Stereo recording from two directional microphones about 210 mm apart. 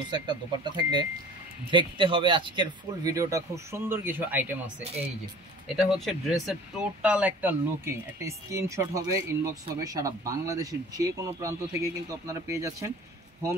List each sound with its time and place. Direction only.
0.1 s speech: 20° right (ahead or behind)